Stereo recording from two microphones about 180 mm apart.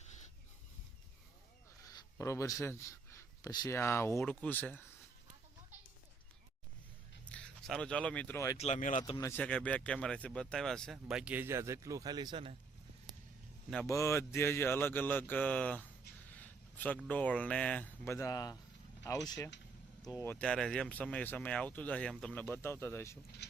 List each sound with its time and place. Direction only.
1.8 s speech: 15° left (ahead or behind)
7.3 s speech: 5° left (ahead or behind)
8.5 s speech: 40° left (ahead or behind)
9.0 s speech: 20° left (ahead or behind); by 12.5 s 30° right (ahead or behind)
13.8 s speech: 15° left (ahead or behind)
16.2 s a sound: 10° left (ahead or behind)
17.1 s speech: 10° left (ahead or behind)